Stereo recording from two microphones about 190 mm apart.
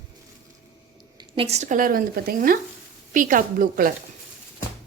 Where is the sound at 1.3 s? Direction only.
35° right (ahead or behind).